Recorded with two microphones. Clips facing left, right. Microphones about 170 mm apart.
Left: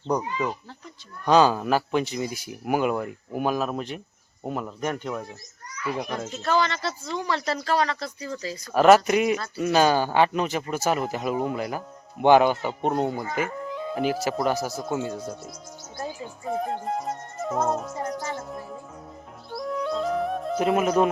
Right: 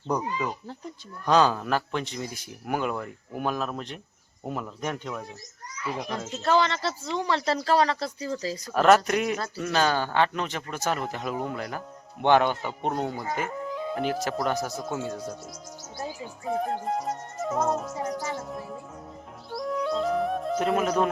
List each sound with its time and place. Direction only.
1.2 s speech: centre (ahead or behind)
6.8 s speech: 25° right (ahead or behind)
8.7 s speech: 5° left (ahead or behind)
19.5 s music: centre (ahead or behind)